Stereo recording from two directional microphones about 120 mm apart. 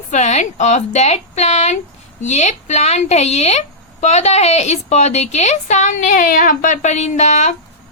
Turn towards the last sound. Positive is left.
turn(degrees=75)  # may be behind; listen again after turning